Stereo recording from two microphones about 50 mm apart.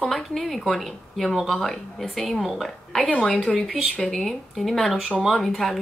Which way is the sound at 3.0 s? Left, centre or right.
Left.